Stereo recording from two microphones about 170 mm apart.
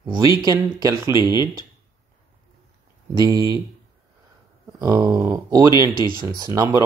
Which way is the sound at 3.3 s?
20° right (ahead or behind).